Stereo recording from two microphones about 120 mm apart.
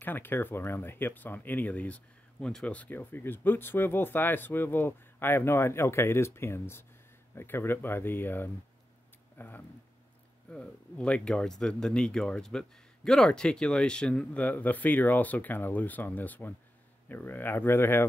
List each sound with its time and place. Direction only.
0.0 s speech: 15° left (ahead or behind)